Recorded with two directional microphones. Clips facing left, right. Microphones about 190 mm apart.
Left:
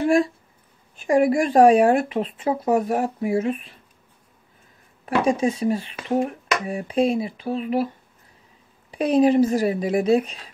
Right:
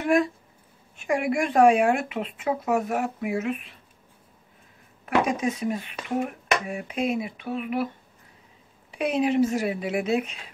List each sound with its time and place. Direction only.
0.0 s speech: 30° left (ahead or behind)
5.0 s speech: 30° left (ahead or behind)
8.9 s speech: 35° left (ahead or behind)